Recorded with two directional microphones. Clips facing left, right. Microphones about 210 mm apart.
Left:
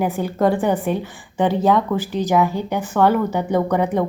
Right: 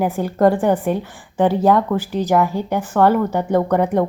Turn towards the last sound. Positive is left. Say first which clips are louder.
# right 2 dB
turn(degrees=-5)  # may be behind; listen again after turning